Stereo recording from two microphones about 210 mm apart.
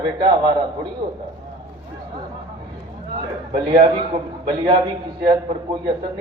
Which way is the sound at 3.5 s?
20° right (ahead or behind).